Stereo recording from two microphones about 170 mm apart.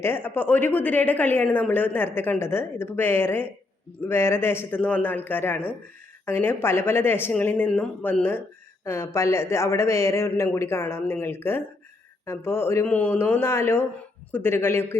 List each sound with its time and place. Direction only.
0.0 s speech: 10° left (ahead or behind)